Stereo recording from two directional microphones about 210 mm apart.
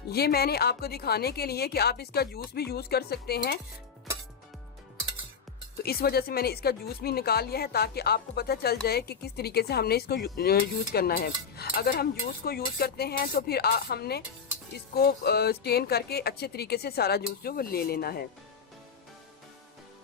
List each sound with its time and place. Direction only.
0.1 s speech: 50° left (ahead or behind)
5.7 s speech: 45° left (ahead or behind)